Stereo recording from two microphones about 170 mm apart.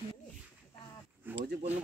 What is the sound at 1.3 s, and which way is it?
Speech, 75° right (ahead or behind).